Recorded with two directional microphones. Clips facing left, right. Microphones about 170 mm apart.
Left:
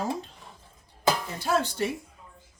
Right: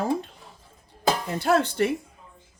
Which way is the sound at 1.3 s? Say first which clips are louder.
Right 5 dB; 65° right (ahead or behind).